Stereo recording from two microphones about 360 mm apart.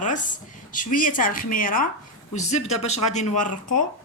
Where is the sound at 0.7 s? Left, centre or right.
Left.